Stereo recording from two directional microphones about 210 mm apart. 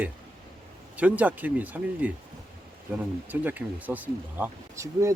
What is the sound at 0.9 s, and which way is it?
Speech, 5° right (ahead or behind).